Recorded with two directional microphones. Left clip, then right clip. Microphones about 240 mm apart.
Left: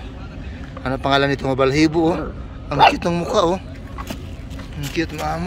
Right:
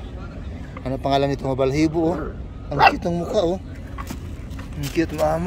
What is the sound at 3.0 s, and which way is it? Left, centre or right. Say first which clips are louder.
Speech: left 3 dB; centre.